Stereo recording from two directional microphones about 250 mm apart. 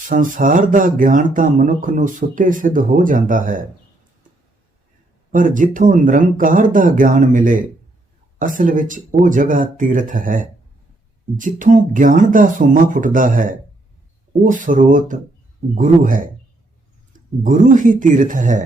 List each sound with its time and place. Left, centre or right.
0.1 s speech: right
5.3 s speech: right
17.4 s speech: right